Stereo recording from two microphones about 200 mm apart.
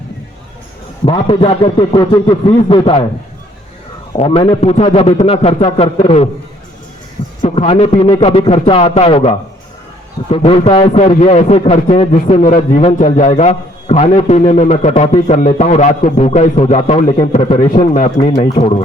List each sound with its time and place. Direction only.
1.0 s speech: 25° left (ahead or behind)
4.2 s speech: 25° left (ahead or behind)
7.4 s a man's voice: 30° left (ahead or behind)